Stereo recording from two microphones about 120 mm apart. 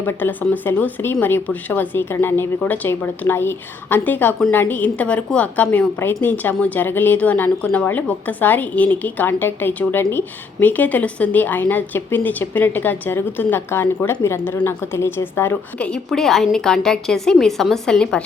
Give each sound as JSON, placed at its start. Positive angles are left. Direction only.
{"t": 0.0, "sound": "a woman's voice", "side_deg": 15}
{"t": 15.9, "sound": "a woman's voice", "side_deg": 5}